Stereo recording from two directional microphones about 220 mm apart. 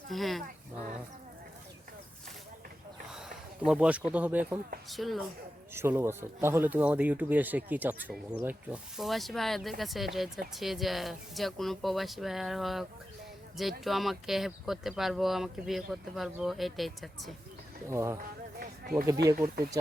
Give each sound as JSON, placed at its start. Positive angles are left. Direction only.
{"t": 0.1, "sound": "speech", "side_deg": 0}
{"t": 3.1, "sound": "speech", "side_deg": 0}
{"t": 5.7, "sound": "speech", "side_deg": -10}
{"t": 17.8, "sound": "speech", "side_deg": -10}
{"t": 18.6, "sound": "a sound", "side_deg": -40}